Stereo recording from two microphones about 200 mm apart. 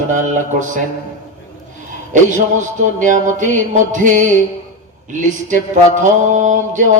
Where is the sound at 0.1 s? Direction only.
40° right (ahead or behind).